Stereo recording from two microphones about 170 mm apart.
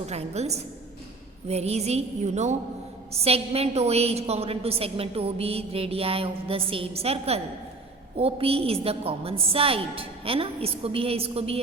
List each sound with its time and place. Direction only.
0.1 s a woman's voice: 40° right (ahead or behind)